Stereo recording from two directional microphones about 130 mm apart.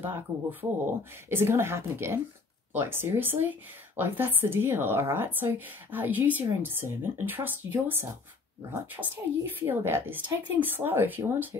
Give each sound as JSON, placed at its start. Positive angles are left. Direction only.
{"t": 0.0, "sound": "a woman's voice", "side_deg": -15}